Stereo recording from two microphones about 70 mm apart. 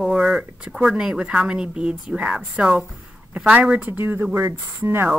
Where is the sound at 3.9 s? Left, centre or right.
Right.